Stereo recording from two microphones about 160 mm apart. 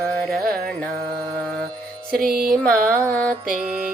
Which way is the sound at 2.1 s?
65° right (ahead or behind).